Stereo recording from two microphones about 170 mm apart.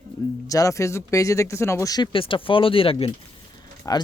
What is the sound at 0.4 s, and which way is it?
Speech, 20° left (ahead or behind).